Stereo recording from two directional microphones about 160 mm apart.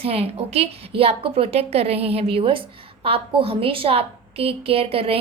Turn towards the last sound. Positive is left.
turn(degrees=-35)  # may be behind; listen again after turning